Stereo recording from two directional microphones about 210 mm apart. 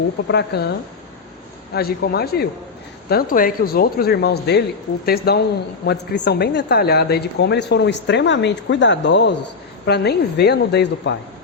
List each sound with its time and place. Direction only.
0.3 s speech: 50° left (ahead or behind)
1.7 s speech: 50° left (ahead or behind)